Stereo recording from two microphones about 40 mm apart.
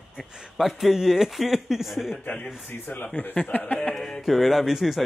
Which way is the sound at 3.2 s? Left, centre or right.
Left.